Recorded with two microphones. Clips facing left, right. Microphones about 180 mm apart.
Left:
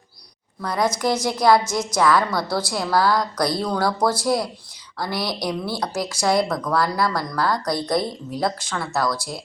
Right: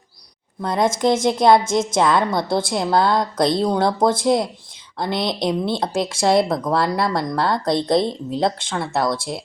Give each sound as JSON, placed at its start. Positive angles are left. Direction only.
{"t": 0.6, "sound": "speech", "side_deg": -25}